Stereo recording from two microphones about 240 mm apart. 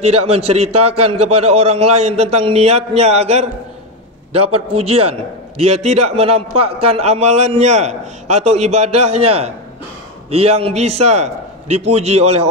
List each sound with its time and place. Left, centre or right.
0.0 s a man's voice: right
4.3 s a man's voice: right
4.7 s a man's voice: right